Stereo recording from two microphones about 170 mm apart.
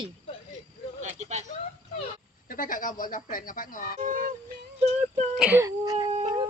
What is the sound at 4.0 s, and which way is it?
Music, 55° right (ahead or behind).